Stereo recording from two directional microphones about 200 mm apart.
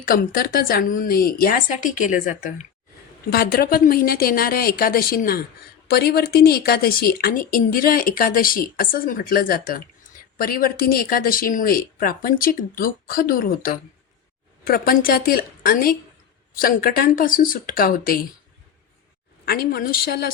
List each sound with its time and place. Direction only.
0.0 s a woman's voice: 45° left (ahead or behind)
19.5 s a woman's voice: 50° left (ahead or behind)